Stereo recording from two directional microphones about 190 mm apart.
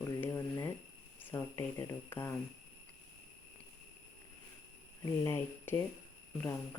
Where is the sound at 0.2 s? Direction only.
15° left (ahead or behind).